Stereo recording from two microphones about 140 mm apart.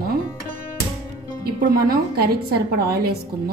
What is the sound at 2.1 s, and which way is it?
A woman's voice, 90° right.